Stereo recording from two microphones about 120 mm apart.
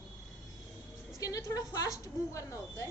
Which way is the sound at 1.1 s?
30° left (ahead or behind).